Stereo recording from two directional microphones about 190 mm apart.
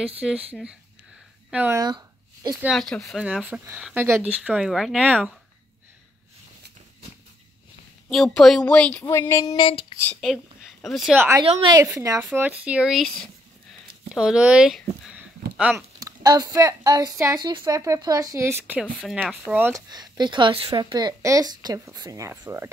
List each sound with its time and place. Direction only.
0.0 s speech: 5° right (ahead or behind)
1.8 s a sound: 20° right (ahead or behind)
2.6 s speech: centre (ahead or behind)
8.1 s speech: centre (ahead or behind)
9.0 s a sound: 15° left (ahead or behind)
9.6 s female singing: 25° left (ahead or behind)
10.2 s a woman's voice: centre (ahead or behind)
11.4 s speech: 25° right (ahead or behind)
11.8 s a woman's voice: 15° right (ahead or behind)
16.0 s a woman's voice: 20° right (ahead or behind)
19.9 s a woman's voice: 20° right (ahead or behind)